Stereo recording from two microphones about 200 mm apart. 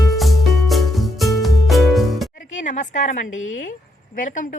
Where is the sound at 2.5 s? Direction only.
40° left (ahead or behind).